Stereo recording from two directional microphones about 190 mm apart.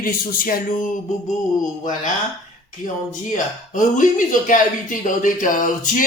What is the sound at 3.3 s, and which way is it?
Speech, 45° left (ahead or behind).